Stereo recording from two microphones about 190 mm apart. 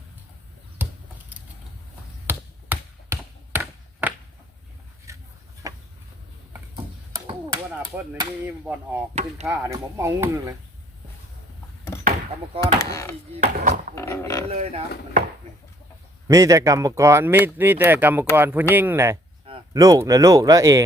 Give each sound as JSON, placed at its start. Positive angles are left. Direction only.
{"t": 2.2, "sound": "tap", "side_deg": -10}
{"t": 5.1, "sound": "a sound", "side_deg": -15}
{"t": 8.4, "sound": "speech", "side_deg": -10}
{"t": 12.5, "sound": "speech", "side_deg": 20}
{"t": 13.4, "sound": "speech", "side_deg": -40}
{"t": 13.9, "sound": "roaring cats", "side_deg": 15}
{"t": 14.5, "sound": "speech", "side_deg": -35}
{"t": 16.2, "sound": "speech", "side_deg": -15}